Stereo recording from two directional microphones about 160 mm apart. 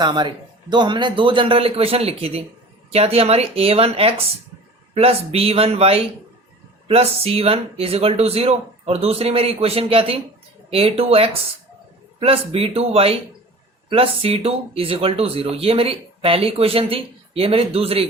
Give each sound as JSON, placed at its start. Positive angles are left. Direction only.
{"t": 0.0, "sound": "speech", "side_deg": -30}